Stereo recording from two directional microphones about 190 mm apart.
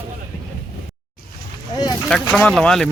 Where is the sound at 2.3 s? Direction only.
5° left (ahead or behind).